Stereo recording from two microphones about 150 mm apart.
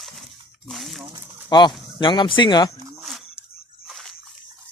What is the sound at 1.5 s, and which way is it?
Speech, 30° left (ahead or behind).